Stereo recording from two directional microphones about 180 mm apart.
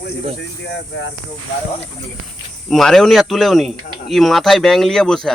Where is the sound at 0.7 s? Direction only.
90° left.